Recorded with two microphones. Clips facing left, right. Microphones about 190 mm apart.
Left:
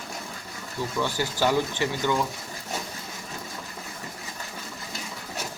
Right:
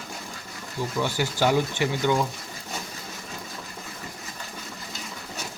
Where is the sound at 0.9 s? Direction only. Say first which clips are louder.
Right 1 dB; 10° right (ahead or behind).